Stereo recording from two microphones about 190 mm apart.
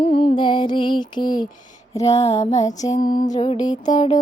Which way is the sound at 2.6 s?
20° left (ahead or behind).